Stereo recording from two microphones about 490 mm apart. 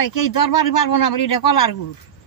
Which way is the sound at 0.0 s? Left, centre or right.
Left.